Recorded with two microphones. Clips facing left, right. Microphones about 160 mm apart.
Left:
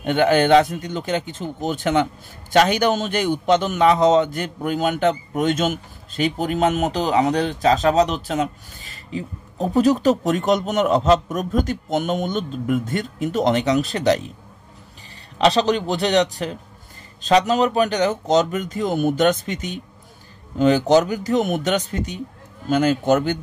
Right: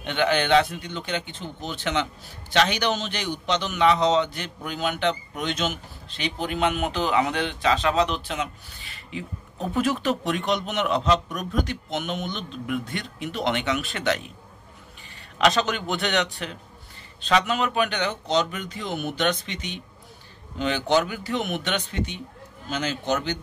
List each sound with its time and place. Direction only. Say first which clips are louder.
0.0 s a man's voice: left 7 dB; 45° left (ahead or behind)
15.3 s a man's voice: left 5 dB; 35° left (ahead or behind); by 23.4 s 50° left (ahead or behind)